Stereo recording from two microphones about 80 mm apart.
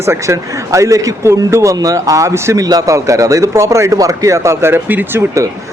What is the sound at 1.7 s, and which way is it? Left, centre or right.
Speech, right.